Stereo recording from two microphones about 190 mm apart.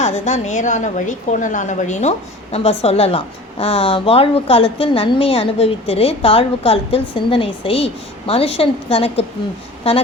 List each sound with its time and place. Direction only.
0.0 s a woman's voice: 35° left (ahead or behind)